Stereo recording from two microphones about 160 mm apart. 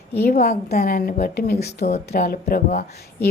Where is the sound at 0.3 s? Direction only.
70° left (ahead or behind).